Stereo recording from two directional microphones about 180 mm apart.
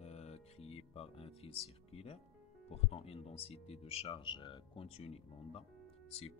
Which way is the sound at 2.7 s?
35° left (ahead or behind).